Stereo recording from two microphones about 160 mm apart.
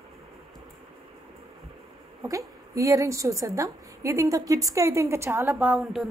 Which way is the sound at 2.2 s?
20° right (ahead or behind).